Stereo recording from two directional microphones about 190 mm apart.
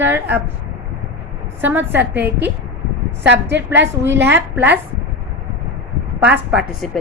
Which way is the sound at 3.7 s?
10° right (ahead or behind).